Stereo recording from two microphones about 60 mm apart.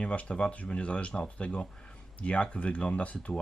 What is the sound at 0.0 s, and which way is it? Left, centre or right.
Speech, left.